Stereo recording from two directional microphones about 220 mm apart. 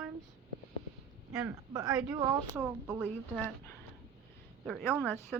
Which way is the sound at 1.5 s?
15° right (ahead or behind).